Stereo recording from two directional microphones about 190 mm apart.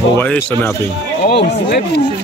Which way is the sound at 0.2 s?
10° left (ahead or behind).